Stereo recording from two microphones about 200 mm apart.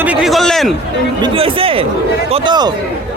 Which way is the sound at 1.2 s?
25° right (ahead or behind).